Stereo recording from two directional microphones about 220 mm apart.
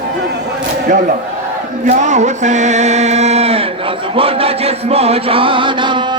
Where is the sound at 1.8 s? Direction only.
35° right (ahead or behind).